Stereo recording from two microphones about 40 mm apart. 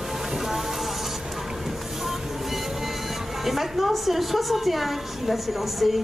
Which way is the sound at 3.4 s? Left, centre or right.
Centre.